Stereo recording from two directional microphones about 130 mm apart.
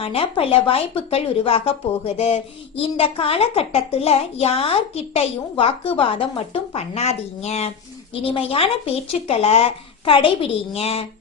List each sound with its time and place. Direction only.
0.0 s speech: 45° left (ahead or behind)